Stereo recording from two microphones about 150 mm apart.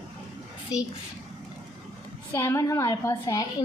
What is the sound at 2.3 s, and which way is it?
Speech, 15° left (ahead or behind).